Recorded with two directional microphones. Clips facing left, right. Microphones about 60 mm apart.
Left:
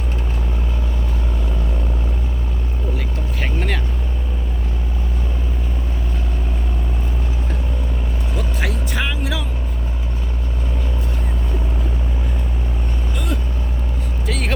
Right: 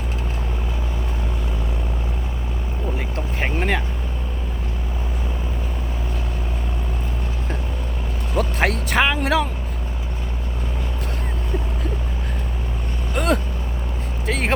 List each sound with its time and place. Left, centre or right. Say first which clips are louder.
3.4 s boat: right 3 dB; right
8.4 s vehicle: right 6 dB; right
13.1 s vehicle: right 8 dB; right
14.3 s vehicle: right 2 dB; right